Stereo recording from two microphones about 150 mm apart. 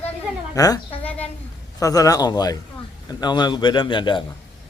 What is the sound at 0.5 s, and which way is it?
A man's voice, 25° left (ahead or behind).